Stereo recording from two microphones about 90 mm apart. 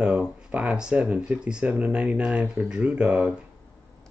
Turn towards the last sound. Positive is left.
turn(degrees=-10)  # may be behind; listen again after turning